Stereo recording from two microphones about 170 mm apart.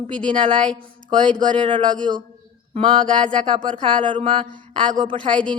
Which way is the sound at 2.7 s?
30° right (ahead or behind).